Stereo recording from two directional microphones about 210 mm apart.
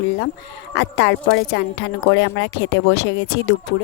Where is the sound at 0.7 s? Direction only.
55° left (ahead or behind).